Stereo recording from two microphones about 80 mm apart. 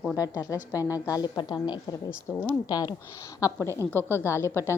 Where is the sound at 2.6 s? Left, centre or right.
Left.